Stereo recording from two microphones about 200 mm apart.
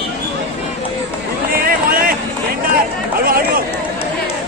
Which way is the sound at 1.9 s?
45° right (ahead or behind).